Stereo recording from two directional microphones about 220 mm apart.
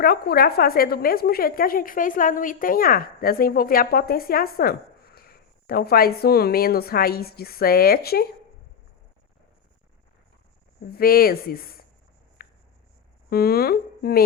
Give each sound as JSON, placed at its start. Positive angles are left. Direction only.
{"t": 0.0, "sound": "a woman's voice", "side_deg": 45}
{"t": 10.9, "sound": "a woman's voice", "side_deg": 45}
{"t": 12.4, "sound": "a sound", "side_deg": 40}
{"t": 13.3, "sound": "a woman's voice", "side_deg": 45}